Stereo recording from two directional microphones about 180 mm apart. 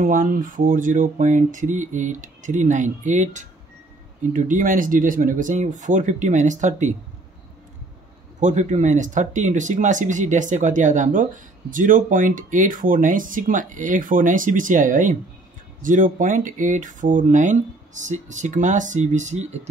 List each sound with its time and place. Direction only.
0.0 s speech: 50° right (ahead or behind)
8.4 s speech: 40° right (ahead or behind)